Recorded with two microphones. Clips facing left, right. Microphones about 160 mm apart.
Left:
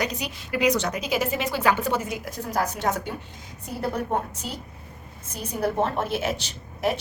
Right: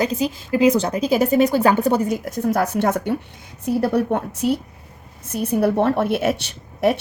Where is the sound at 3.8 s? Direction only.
70° right (ahead or behind).